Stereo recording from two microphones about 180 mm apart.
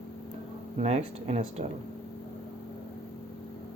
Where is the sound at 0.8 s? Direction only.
35° right (ahead or behind).